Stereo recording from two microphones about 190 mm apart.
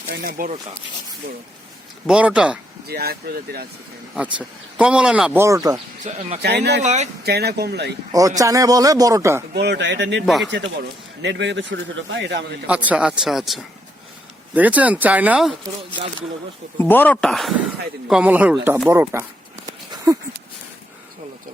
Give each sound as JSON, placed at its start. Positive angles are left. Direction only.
{"t": 0.1, "sound": "speech", "side_deg": -55}
{"t": 2.0, "sound": "speech", "side_deg": -5}
{"t": 2.8, "sound": "speech", "side_deg": -55}
{"t": 4.1, "sound": "speech", "side_deg": -5}
{"t": 6.1, "sound": "speech", "side_deg": -35}
{"t": 6.4, "sound": "speech", "side_deg": -60}
{"t": 6.8, "sound": "speech", "side_deg": -35}
{"t": 7.3, "sound": "speech", "side_deg": -60}
{"t": 8.4, "sound": "speech", "side_deg": -15}
{"t": 9.6, "sound": "a man's voice", "side_deg": -65}
{"t": 12.6, "sound": "speech", "side_deg": -5}
{"t": 16.7, "sound": "speech", "side_deg": 10}